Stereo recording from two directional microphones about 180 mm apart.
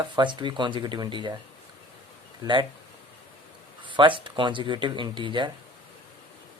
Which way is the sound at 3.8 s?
25° right (ahead or behind).